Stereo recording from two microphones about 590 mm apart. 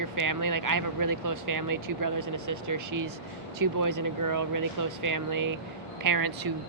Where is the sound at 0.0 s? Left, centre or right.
Right.